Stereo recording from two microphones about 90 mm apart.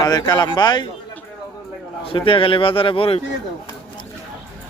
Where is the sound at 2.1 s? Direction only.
85° left.